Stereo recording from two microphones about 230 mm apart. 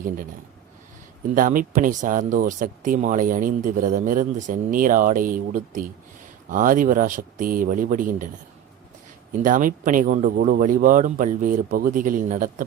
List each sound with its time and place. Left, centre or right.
1.4 s speech: right
9.4 s speech: right